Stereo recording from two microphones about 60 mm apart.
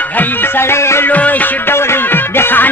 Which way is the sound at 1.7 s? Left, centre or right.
Left.